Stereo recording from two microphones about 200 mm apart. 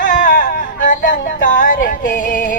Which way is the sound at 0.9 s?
40° left (ahead or behind).